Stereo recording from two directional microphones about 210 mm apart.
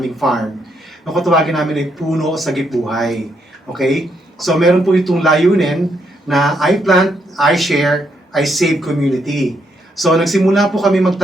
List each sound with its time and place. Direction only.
0.0 s speech: centre (ahead or behind)